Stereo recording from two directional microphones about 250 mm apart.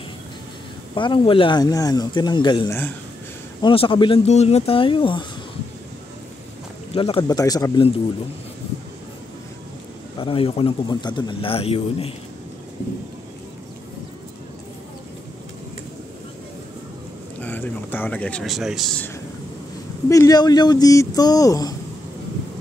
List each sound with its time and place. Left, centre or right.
0.9 s a man's voice: centre
6.9 s speech: left
10.1 s a man's voice: left
17.4 s speech: centre
20.1 s speech: centre